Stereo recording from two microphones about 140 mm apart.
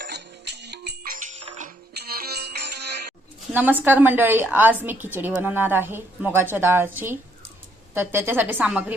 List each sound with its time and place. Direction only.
1.0 s music: 75° right (ahead or behind)
3.5 s a woman's voice: 15° right (ahead or behind)